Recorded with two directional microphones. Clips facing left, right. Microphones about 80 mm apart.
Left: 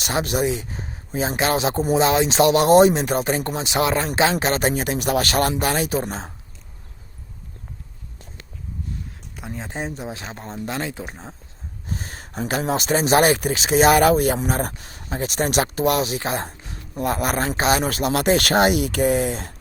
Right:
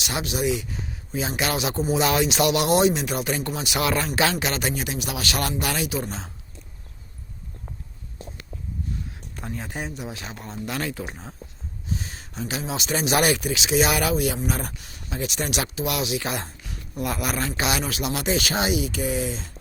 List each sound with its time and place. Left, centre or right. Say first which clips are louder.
0.0 s speech: left 4 dB; left
9.3 s a sound: even; centre
9.6 s speech: left 4 dB; left
11.9 s speech: left 1 dB; left